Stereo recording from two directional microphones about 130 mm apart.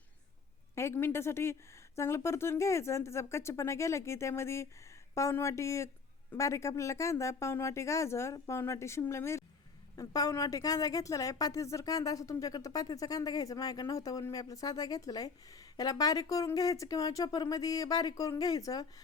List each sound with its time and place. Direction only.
0.8 s a woman's voice: 20° left (ahead or behind)